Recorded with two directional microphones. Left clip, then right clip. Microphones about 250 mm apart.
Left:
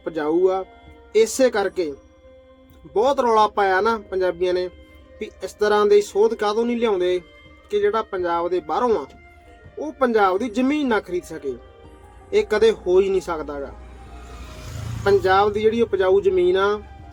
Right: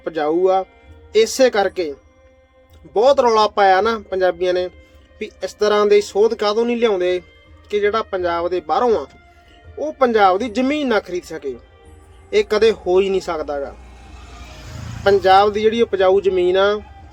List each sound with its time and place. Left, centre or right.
0.0 s speech: centre
15.0 s speech: centre